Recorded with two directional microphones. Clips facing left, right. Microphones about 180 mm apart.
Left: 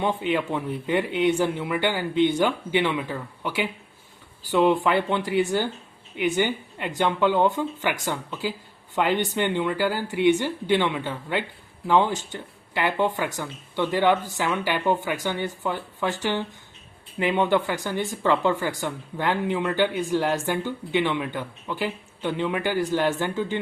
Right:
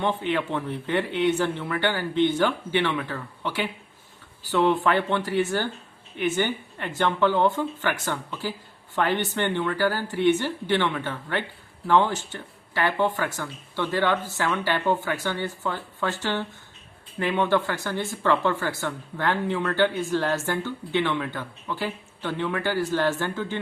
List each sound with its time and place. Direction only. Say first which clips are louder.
0.0 s speech: left 1 dB; 10° left (ahead or behind)